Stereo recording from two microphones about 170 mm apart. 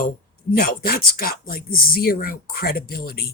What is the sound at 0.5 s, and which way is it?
Speech, 60° left (ahead or behind).